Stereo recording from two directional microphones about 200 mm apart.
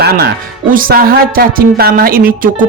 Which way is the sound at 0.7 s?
45° right (ahead or behind).